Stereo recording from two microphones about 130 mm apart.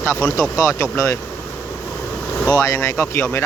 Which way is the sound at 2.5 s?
25° left (ahead or behind).